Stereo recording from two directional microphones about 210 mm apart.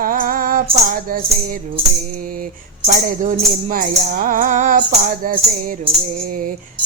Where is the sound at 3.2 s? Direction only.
35° right (ahead or behind).